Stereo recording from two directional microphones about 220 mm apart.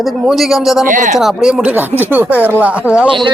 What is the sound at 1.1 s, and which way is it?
A man's voice, centre (ahead or behind).